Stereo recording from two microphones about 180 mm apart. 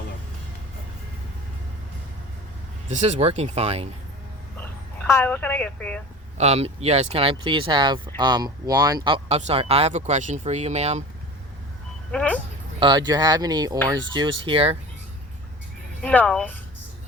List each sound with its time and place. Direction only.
2.9 s speech: 40° right (ahead or behind)
5.0 s a woman's voice: 15° left (ahead or behind)
6.3 s speech: 35° right (ahead or behind)
12.1 s a woman's voice: 10° left (ahead or behind)
12.8 s speech: 25° right (ahead or behind)
16.0 s a woman's voice: 5° left (ahead or behind)